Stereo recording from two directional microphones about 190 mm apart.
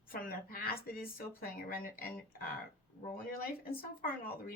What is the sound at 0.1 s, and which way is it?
Speech, 50° left (ahead or behind).